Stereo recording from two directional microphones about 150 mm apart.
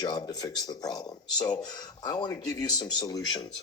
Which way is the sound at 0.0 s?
25° left (ahead or behind).